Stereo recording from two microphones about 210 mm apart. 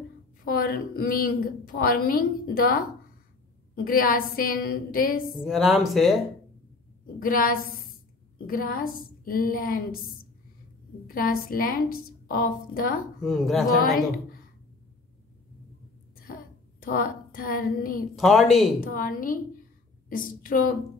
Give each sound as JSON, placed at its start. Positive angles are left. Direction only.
{"t": 0.5, "sound": "a woman's voice", "side_deg": 45}
{"t": 5.4, "sound": "speech", "side_deg": 0}
{"t": 7.2, "sound": "a woman's voice", "side_deg": 45}
{"t": 11.1, "sound": "a woman's voice", "side_deg": 45}
{"t": 13.2, "sound": "speech", "side_deg": 0}
{"t": 13.9, "sound": "a woman's voice", "side_deg": 45}
{"t": 16.8, "sound": "a woman's voice", "side_deg": 40}
{"t": 18.1, "sound": "speech", "side_deg": 0}
{"t": 18.8, "sound": "a woman's voice", "side_deg": 40}